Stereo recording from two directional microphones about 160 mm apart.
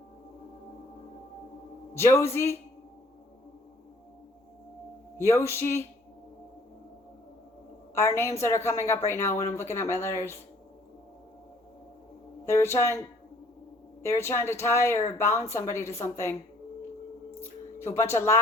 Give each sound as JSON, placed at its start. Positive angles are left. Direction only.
{"t": 2.0, "sound": "speech", "side_deg": 15}
{"t": 5.1, "sound": "speech", "side_deg": 15}
{"t": 7.9, "sound": "speech", "side_deg": 15}
{"t": 12.5, "sound": "speech", "side_deg": 15}
{"t": 14.0, "sound": "speech", "side_deg": 15}
{"t": 17.4, "sound": "speech", "side_deg": 15}